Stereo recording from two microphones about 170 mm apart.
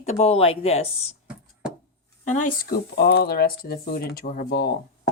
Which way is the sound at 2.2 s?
50° left (ahead or behind).